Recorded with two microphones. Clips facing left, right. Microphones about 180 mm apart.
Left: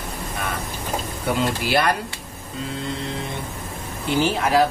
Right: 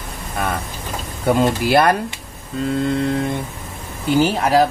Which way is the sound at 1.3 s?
45° right (ahead or behind).